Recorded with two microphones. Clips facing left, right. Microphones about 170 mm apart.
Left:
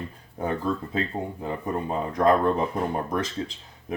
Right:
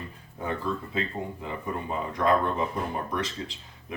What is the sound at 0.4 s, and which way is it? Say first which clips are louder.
Speech: left 4 dB; 40° left (ahead or behind).